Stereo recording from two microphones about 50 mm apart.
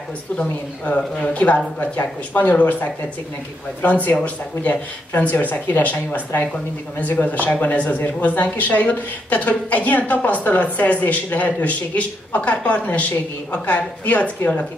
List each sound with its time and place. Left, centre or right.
0.4 s speech: left